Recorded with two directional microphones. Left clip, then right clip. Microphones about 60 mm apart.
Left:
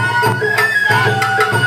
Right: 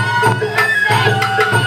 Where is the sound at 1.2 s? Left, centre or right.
Left.